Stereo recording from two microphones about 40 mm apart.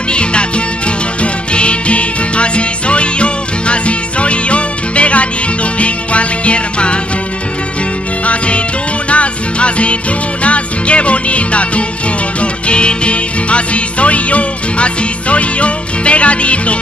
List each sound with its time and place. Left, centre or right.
0.1 s music: left
8.3 s music: left